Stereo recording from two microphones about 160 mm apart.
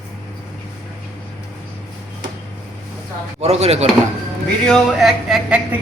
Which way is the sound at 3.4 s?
40° right (ahead or behind).